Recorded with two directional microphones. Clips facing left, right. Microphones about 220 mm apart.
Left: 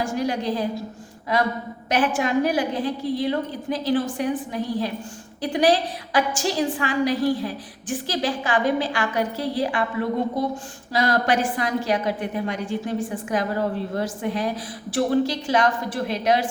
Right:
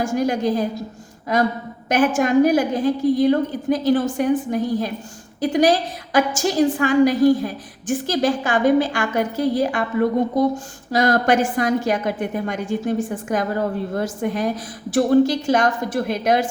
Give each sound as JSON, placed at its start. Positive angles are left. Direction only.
{"t": 0.0, "sound": "a woman's voice", "side_deg": -45}
{"t": 1.9, "sound": "a woman's voice", "side_deg": -45}